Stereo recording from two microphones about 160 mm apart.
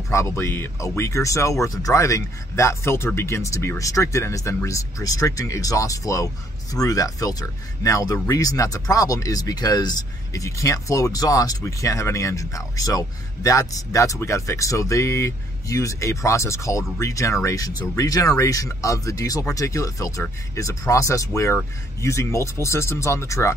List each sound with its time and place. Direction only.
0.1 s speech: 20° left (ahead or behind)